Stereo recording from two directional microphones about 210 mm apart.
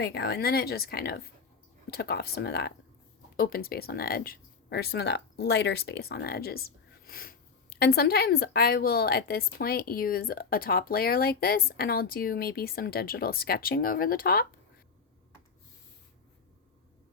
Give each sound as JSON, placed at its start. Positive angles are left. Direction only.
{"t": 0.0, "sound": "speech", "side_deg": 50}